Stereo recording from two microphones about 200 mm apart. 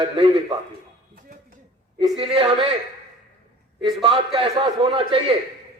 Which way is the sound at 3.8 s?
25° right (ahead or behind).